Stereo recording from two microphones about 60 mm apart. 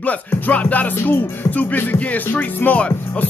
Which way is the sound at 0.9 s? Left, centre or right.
Left.